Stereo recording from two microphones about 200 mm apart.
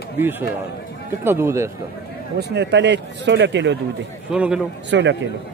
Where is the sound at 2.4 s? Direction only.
55° right (ahead or behind).